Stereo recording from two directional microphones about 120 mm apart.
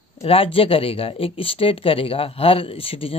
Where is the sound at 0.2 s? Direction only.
50° left (ahead or behind).